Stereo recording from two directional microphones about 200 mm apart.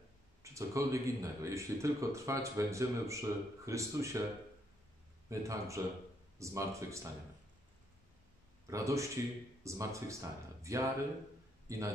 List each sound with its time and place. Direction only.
0.4 s speech: 15° right (ahead or behind)
5.3 s speech: 15° right (ahead or behind)
8.6 s speech: 15° right (ahead or behind)